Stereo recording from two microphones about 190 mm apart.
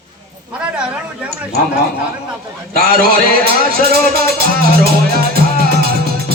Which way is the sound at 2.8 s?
50° right (ahead or behind).